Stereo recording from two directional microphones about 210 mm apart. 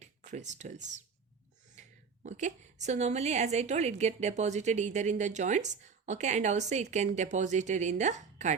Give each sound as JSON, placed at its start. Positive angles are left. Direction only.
{"t": 0.0, "sound": "a woman's voice", "side_deg": -35}